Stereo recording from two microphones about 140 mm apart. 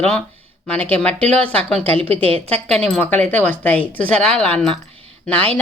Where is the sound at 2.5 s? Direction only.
5° left (ahead or behind).